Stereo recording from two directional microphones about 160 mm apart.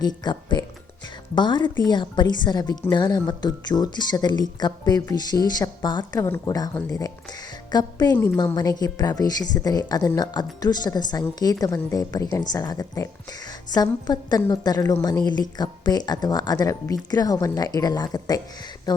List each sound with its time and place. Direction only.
0.0 s speech: 30° left (ahead or behind)